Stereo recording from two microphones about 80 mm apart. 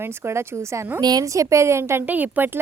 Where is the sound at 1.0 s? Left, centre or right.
Right.